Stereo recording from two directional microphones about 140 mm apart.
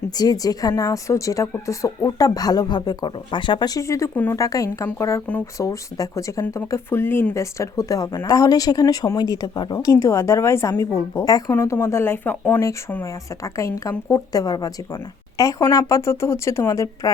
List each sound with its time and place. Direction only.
0.2 s speech: 25° left (ahead or behind)
4.4 s speech: 25° left (ahead or behind)